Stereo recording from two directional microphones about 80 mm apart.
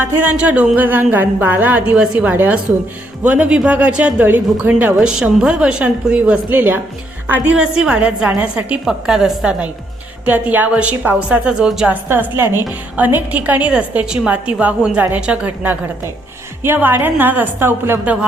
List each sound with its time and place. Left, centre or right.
0.0 s a woman's voice: right
11.9 s a woman's voice: right